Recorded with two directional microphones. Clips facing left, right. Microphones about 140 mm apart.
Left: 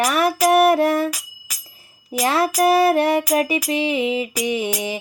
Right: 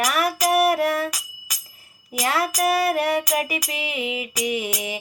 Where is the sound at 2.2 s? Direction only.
25° left (ahead or behind).